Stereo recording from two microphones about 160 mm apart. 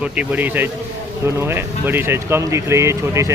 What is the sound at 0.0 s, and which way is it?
Speech, 10° right (ahead or behind).